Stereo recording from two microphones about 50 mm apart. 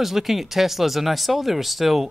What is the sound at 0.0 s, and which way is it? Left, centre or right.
Speech, centre.